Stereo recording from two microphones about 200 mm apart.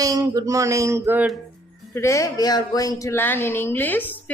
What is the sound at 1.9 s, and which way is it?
Speech, 15° left (ahead or behind).